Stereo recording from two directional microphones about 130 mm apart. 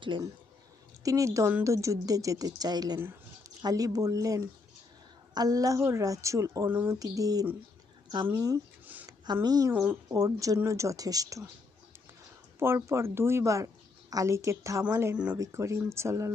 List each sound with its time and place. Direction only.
0.1 s speech: 40° right (ahead or behind)
1.0 s speech: 25° right (ahead or behind)
12.5 s speech: 20° right (ahead or behind)